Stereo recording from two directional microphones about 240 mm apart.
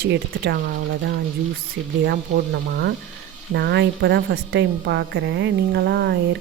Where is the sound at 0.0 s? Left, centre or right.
Right.